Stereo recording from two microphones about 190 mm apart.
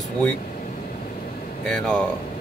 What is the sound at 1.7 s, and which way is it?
Speech, 5° left (ahead or behind).